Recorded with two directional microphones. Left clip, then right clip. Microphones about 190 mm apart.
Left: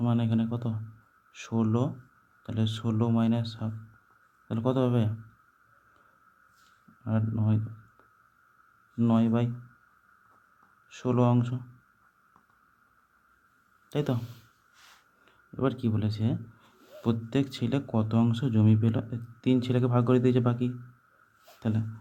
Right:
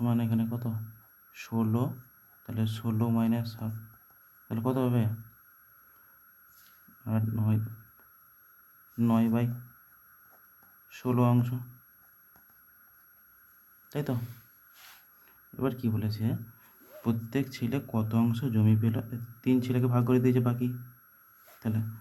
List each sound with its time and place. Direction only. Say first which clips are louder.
0.0 s speech: left 2 dB; 10° left (ahead or behind)
7.0 s speech: left 2 dB; 10° left (ahead or behind)
9.0 s speech: left 1 dB; 10° left (ahead or behind)
10.8 s speech: left 2 dB; 10° left (ahead or behind)
13.9 s speech: left 4 dB; 15° left (ahead or behind)
15.5 s speech: left 3 dB; 15° left (ahead or behind)
21.6 s a sound: left 3 dB; 15° left (ahead or behind)